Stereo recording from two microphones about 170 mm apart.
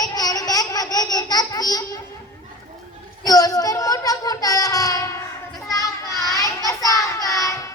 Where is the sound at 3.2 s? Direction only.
20° left (ahead or behind).